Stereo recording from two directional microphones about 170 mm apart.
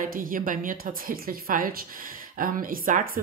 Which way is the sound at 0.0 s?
55° right (ahead or behind).